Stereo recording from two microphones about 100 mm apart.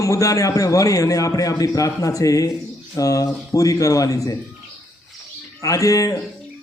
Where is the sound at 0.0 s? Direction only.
35° left (ahead or behind).